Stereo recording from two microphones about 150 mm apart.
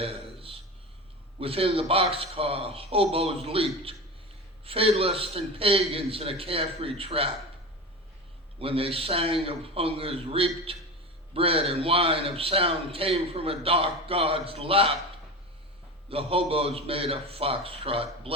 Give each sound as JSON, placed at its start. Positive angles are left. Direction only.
{"t": 0.0, "sound": "a sound", "side_deg": -40}
{"t": 1.4, "sound": "a man's voice", "side_deg": -40}
{"t": 8.5, "sound": "a man's voice", "side_deg": -40}
{"t": 16.0, "sound": "a man's voice", "side_deg": -40}